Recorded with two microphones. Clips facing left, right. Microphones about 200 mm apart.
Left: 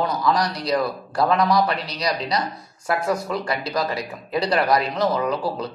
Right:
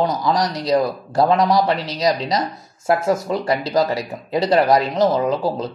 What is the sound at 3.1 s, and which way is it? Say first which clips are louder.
Speech: right 5 dB; 25° right (ahead or behind).